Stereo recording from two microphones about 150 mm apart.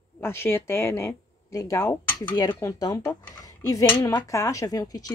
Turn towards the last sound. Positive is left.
turn(degrees=25)  # may be behind; listen again after turning